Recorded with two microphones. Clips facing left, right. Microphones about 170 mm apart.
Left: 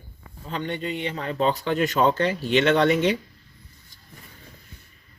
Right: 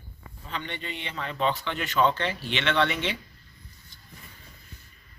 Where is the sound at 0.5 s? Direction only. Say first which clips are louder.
Left 7 dB; 40° left (ahead or behind).